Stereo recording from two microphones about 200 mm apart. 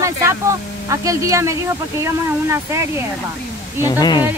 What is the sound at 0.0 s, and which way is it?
Speech, 15° right (ahead or behind).